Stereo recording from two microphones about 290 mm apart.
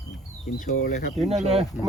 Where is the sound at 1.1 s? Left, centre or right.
Right.